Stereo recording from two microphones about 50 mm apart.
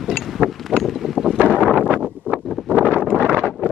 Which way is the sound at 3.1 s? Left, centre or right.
Right.